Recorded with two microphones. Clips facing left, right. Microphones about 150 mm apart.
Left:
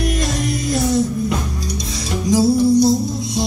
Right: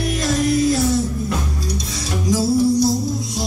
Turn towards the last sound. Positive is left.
turn(degrees=20)  # may be behind; listen again after turning